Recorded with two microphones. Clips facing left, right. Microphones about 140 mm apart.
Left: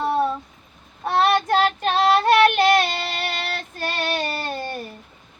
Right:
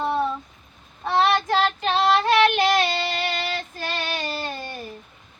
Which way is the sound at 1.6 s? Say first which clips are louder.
Left 2 dB; 55° left (ahead or behind).